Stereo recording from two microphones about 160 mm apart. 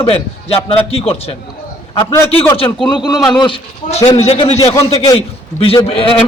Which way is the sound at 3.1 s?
5° left (ahead or behind).